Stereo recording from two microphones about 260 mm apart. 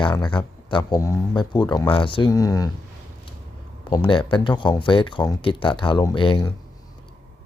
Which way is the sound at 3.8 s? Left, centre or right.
Centre.